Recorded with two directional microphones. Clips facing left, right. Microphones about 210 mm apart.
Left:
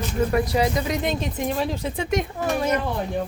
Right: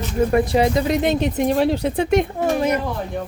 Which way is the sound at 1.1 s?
70° right (ahead or behind).